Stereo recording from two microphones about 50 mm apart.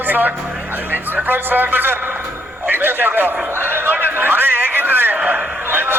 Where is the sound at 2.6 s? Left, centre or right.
Right.